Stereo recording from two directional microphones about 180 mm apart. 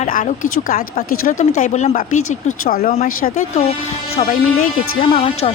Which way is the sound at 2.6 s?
55° left (ahead or behind).